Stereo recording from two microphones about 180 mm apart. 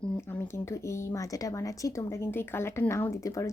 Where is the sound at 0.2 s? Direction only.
15° left (ahead or behind).